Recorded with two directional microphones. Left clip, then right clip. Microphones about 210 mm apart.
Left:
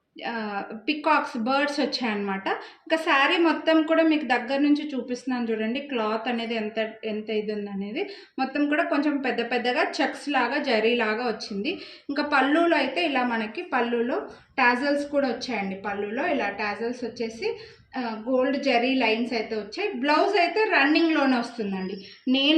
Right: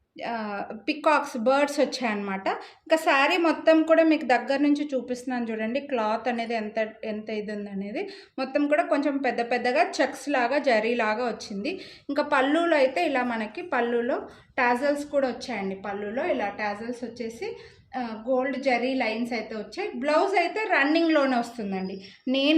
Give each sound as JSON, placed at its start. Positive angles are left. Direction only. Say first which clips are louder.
{"t": 0.3, "sound": "a woman's voice", "louder": "left 1 dB", "side_deg": -60}